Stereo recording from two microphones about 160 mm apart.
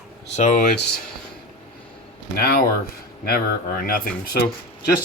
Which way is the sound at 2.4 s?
75° left (ahead or behind).